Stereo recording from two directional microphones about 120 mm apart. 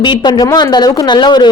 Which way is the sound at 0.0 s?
40° left (ahead or behind).